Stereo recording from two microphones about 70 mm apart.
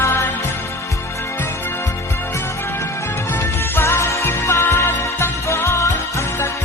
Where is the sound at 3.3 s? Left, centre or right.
Left.